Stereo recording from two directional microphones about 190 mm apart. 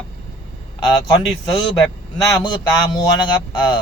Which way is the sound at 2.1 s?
20° left (ahead or behind).